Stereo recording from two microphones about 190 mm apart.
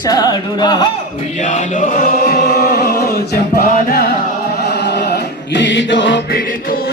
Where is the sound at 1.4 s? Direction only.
40° left (ahead or behind).